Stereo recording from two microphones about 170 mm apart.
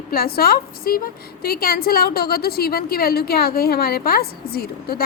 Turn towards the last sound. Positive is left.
turn(degrees=65)  # may be behind; listen again after turning